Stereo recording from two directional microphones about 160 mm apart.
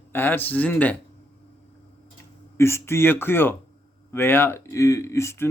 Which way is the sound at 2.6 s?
15° left (ahead or behind).